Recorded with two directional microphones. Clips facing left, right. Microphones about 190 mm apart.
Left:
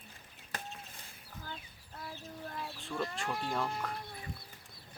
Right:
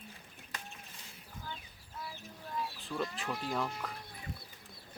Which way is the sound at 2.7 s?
Centre (ahead or behind).